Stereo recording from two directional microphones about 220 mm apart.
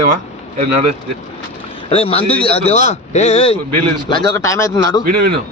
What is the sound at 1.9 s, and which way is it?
Speech, 25° left (ahead or behind).